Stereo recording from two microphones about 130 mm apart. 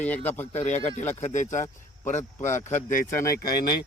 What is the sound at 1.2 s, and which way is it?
Speech, 65° left (ahead or behind).